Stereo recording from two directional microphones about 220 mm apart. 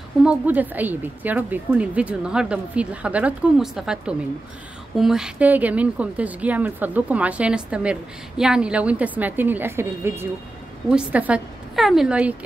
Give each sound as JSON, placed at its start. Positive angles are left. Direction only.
{"t": 0.2, "sound": "a woman's voice", "side_deg": -5}